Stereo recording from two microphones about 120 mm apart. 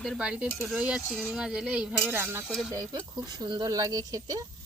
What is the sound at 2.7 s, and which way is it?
Speech, 35° right (ahead or behind).